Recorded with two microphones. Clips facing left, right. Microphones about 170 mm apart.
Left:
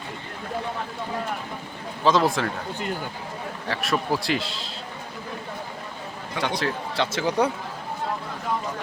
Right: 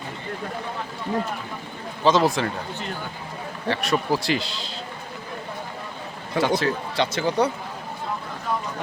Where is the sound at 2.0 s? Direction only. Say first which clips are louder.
Right 1 dB; centre (ahead or behind).